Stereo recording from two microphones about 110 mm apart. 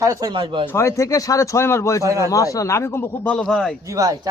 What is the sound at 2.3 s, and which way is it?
Speech, 30° left (ahead or behind).